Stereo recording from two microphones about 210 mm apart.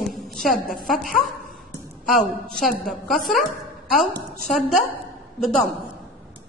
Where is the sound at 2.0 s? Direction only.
Centre (ahead or behind).